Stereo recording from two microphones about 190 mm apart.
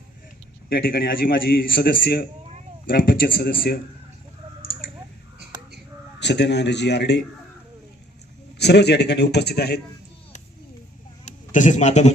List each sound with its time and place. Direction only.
0.7 s a man's voice: 50° left (ahead or behind)
6.1 s a man's voice: 65° left (ahead or behind)
8.5 s a man's voice: 60° left (ahead or behind)
11.3 s speech: 40° left (ahead or behind)